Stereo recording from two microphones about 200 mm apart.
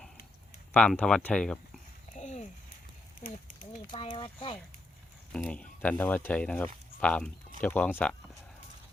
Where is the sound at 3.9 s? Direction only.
25° left (ahead or behind).